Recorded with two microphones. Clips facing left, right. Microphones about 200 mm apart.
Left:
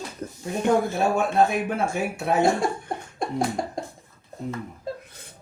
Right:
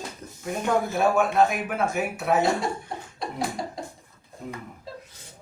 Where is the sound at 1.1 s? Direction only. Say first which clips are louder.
Even; 30° left (ahead or behind).